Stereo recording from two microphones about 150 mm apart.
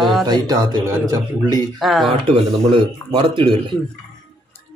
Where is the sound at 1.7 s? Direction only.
Centre (ahead or behind).